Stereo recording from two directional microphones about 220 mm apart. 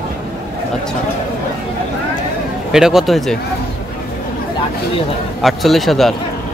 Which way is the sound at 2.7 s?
Centre (ahead or behind).